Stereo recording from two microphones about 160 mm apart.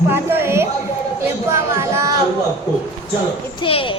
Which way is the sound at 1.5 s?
15° right (ahead or behind).